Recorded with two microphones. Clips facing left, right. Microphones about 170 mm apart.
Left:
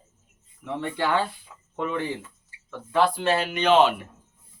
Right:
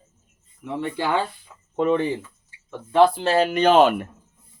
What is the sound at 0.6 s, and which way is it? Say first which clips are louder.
Speech: right 1 dB; 5° right (ahead or behind).